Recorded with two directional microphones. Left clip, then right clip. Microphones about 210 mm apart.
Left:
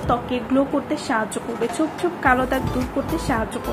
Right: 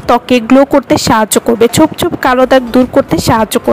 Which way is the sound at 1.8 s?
40° right (ahead or behind).